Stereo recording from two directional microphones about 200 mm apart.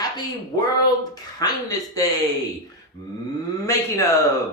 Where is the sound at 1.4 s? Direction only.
20° left (ahead or behind).